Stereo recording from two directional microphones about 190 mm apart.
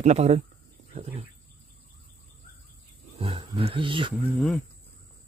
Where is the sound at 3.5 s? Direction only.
30° right (ahead or behind).